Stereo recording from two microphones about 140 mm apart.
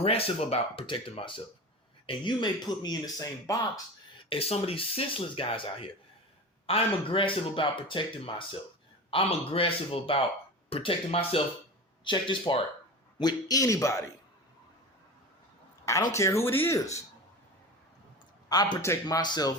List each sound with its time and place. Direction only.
0.0 s speech: 45° left (ahead or behind); by 3.6 s 25° left (ahead or behind)
4.3 s speech: 45° left (ahead or behind); by 14.0 s 20° left (ahead or behind)
16.1 s speech: 20° left (ahead or behind)
18.4 s speech: 30° left (ahead or behind)